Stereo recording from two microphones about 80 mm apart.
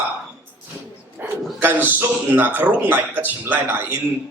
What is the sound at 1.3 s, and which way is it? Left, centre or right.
Speech, right.